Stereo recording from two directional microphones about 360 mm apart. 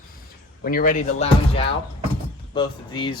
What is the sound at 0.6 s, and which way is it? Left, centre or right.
Speech, left.